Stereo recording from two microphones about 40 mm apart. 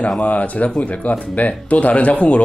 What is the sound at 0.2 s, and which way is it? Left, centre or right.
Speech, left.